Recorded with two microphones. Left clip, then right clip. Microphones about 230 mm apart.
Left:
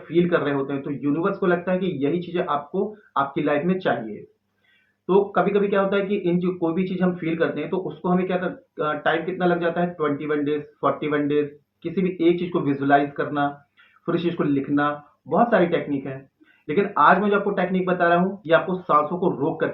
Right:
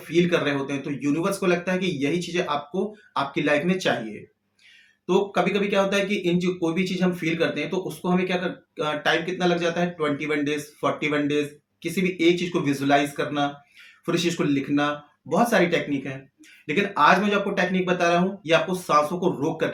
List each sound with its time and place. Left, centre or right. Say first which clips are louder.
0.2 s speech: left 1 dB; right
5.0 s speech: left 3 dB; right